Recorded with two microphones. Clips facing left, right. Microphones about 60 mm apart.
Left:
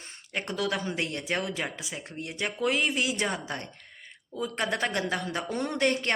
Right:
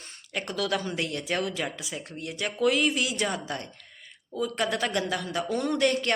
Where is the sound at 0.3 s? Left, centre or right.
Left.